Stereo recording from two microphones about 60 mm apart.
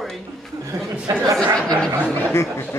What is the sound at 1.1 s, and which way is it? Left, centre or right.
Speech, right.